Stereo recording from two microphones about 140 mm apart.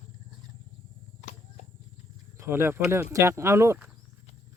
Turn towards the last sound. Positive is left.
turn(degrees=-20)  # may be behind; listen again after turning